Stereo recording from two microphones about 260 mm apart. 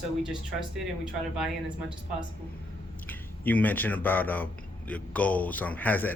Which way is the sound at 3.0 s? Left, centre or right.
Centre.